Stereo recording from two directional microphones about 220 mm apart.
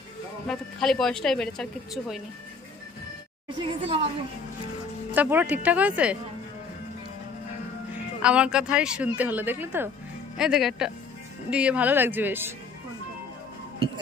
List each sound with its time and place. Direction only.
0.5 s speech: centre (ahead or behind)
3.4 s a woman's voice: 25° right (ahead or behind)
5.1 s speech: 10° right (ahead or behind)
7.9 s speech: 5° right (ahead or behind)